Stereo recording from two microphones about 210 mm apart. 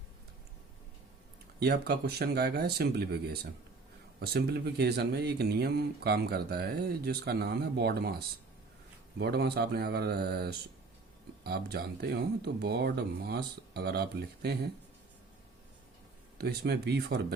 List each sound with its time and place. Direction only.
1.5 s speech: 50° right (ahead or behind)
9.1 s speech: 50° right (ahead or behind)
16.4 s speech: 50° right (ahead or behind)